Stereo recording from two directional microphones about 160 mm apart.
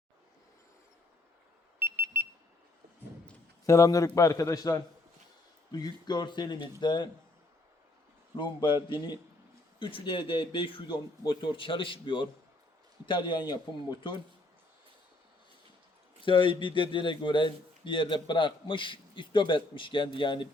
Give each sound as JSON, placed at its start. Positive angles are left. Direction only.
{"t": 1.8, "sound": "alarm", "side_deg": -15}
{"t": 3.7, "sound": "speech", "side_deg": 20}
{"t": 8.4, "sound": "a man's voice", "side_deg": 30}
{"t": 16.2, "sound": "a man's voice", "side_deg": 30}